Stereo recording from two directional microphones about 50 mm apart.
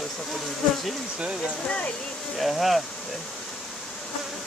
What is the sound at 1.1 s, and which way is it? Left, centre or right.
Speech, right.